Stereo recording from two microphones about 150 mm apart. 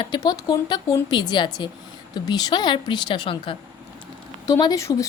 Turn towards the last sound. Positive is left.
turn(degrees=20)  # may be behind; listen again after turning